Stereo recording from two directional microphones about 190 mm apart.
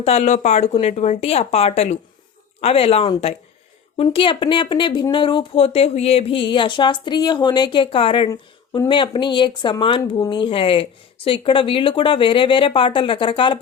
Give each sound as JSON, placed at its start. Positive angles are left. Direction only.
{"t": 0.0, "sound": "speech", "side_deg": 35}